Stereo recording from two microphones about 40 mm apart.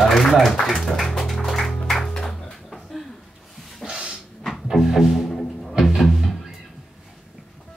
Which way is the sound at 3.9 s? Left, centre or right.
Right.